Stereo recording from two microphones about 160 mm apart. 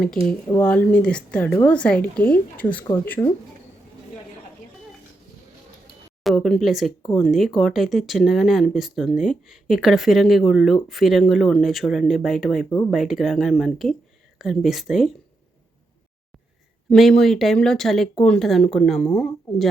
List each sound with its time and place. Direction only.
0.7 s speech: 10° left (ahead or behind)
3.1 s speech: 20° left (ahead or behind)
6.2 s speech: centre (ahead or behind)
16.9 s speech: centre (ahead or behind)